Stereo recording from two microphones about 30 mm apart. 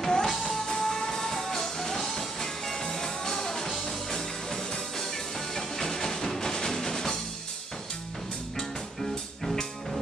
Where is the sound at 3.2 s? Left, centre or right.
Centre.